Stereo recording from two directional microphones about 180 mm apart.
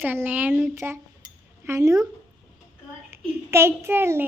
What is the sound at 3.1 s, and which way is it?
A child's voice, 15° right (ahead or behind).